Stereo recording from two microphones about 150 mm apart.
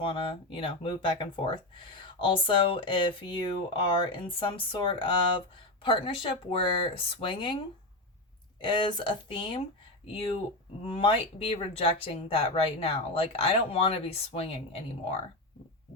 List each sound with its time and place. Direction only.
0.0 s speech: 35° left (ahead or behind)
8.6 s speech: 30° left (ahead or behind)